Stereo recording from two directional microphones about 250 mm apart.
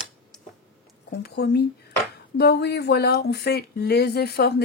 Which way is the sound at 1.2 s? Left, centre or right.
Left.